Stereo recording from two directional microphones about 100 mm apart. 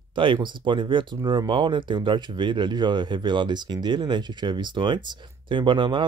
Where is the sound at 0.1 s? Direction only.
55° right (ahead or behind).